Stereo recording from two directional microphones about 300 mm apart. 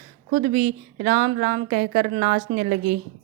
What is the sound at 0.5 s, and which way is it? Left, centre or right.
A woman's voice, right.